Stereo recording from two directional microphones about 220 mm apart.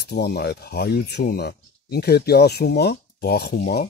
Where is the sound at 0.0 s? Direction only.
50° left (ahead or behind).